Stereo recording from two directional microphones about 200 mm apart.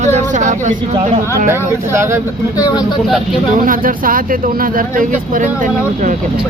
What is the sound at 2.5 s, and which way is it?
Speech, 20° left (ahead or behind).